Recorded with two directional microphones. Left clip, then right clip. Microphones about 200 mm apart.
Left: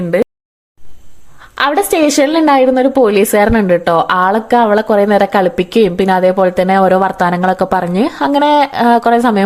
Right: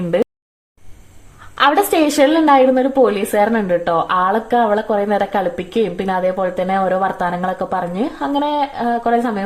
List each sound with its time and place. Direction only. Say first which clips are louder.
1.5 s a woman's voice: left 1 dB; 25° left (ahead or behind)